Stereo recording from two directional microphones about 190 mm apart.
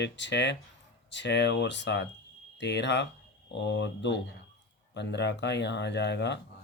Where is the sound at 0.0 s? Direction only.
65° left (ahead or behind).